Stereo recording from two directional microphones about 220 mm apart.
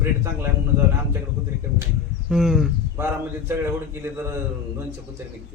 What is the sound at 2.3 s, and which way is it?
Speech, 5° right (ahead or behind).